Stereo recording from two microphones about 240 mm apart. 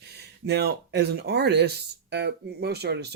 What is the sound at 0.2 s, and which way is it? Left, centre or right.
Speech, right.